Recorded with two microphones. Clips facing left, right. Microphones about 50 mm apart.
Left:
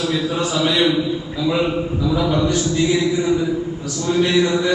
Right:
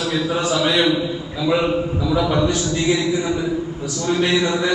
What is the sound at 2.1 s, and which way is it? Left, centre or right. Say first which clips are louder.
Speech: right 1 dB; right.